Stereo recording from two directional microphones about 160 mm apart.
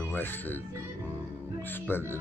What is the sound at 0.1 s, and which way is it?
Speech, 10° left (ahead or behind).